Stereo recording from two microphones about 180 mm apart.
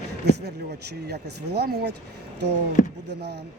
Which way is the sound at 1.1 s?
65° right (ahead or behind).